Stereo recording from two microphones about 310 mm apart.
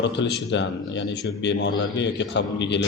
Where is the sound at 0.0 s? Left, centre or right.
Left.